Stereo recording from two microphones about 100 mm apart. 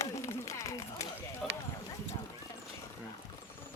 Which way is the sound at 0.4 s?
35° left (ahead or behind).